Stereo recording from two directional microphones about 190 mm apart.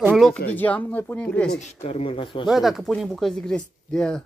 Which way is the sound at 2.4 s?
Centre (ahead or behind).